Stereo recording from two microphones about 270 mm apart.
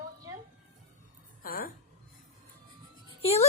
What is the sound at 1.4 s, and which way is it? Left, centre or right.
Music, left.